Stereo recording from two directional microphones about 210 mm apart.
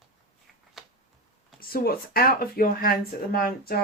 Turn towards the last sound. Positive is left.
turn(degrees=45)  # may be behind; listen again after turning